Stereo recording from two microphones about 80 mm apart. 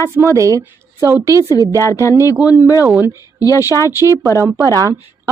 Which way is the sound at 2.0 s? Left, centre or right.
Left.